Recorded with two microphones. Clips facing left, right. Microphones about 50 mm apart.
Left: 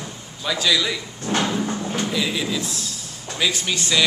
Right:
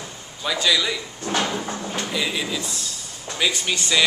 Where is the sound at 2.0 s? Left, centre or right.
Centre.